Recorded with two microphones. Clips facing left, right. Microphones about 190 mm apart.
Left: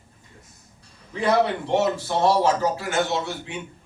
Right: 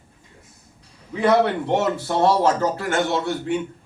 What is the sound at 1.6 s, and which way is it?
A man's voice, 55° right (ahead or behind).